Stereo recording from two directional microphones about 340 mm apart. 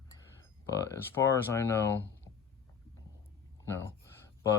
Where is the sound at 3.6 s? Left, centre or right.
Centre.